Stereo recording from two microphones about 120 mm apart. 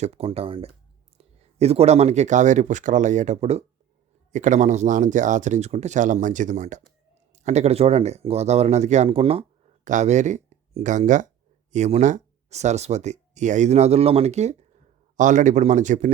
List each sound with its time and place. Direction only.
0.0 s speech: 60° right (ahead or behind)
4.3 s speech: 90° right
7.3 s speech: 70° right (ahead or behind); by 9.5 s 55° right (ahead or behind)
9.8 s speech: 85° right
11.7 s speech: 75° right (ahead or behind)
15.1 s speech: 90° right